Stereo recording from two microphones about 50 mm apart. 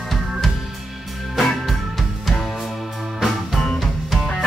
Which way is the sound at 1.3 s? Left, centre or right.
Centre.